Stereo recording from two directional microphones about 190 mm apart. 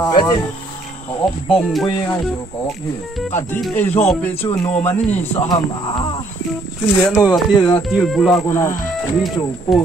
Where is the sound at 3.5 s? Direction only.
10° left (ahead or behind).